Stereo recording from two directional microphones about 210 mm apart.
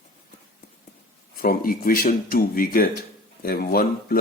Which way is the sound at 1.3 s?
45° left (ahead or behind).